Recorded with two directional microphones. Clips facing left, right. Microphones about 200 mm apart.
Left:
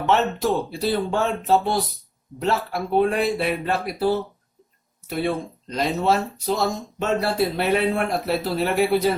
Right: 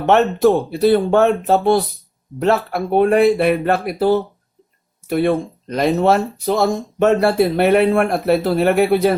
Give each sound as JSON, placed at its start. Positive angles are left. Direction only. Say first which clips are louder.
{"t": 0.0, "sound": "speech", "louder": "right 8 dB", "side_deg": -60}